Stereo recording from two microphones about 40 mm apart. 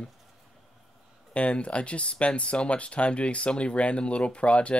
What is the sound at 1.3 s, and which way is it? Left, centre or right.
Speech, left.